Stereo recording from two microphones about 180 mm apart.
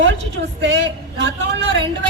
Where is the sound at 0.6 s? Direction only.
75° right (ahead or behind).